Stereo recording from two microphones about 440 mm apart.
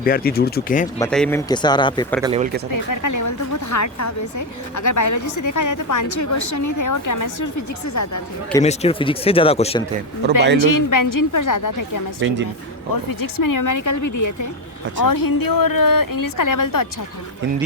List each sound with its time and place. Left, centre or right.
0.0 s speech: centre
0.9 s speech: centre
2.2 s speech: centre
2.7 s a woman's voice: left
8.5 s speech: centre
10.6 s a woman's voice: left
12.2 s speech: right
13.1 s a woman's voice: left